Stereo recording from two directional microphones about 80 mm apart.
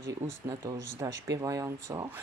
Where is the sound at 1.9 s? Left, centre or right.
Right.